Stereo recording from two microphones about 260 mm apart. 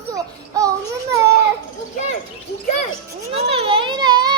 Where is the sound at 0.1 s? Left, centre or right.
Centre.